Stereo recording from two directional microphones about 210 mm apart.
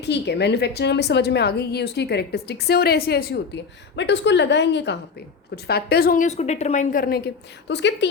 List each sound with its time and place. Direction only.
0.0 s a woman's voice: 55° left (ahead or behind)